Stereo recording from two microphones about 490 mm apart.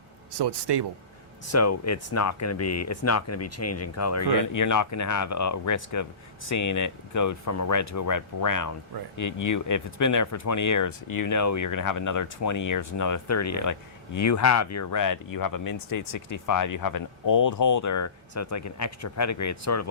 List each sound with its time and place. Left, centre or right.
0.3 s speech: right
1.5 s speech: left